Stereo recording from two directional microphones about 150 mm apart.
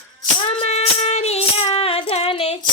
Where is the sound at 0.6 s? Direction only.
40° left (ahead or behind).